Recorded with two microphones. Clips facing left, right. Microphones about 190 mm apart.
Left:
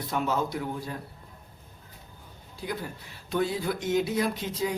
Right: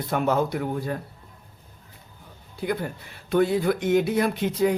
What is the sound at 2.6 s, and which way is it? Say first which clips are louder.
A man's voice: right 7 dB; 60° right (ahead or behind).